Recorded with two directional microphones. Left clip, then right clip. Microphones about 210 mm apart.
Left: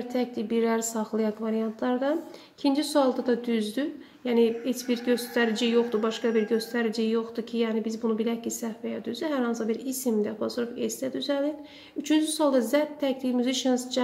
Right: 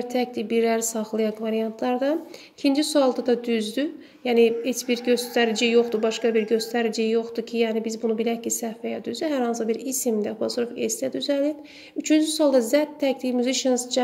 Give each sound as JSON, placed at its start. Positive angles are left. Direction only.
{"t": 0.1, "sound": "a woman's voice", "side_deg": -20}